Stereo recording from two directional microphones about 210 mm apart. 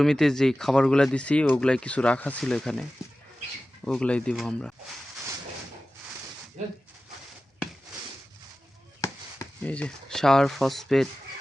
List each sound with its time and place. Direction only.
0.0 s speech: centre (ahead or behind)
3.8 s speech: 5° left (ahead or behind)
9.6 s speech: 5° left (ahead or behind)